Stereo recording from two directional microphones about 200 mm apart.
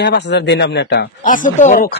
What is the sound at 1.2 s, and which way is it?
Speech, 40° left (ahead or behind).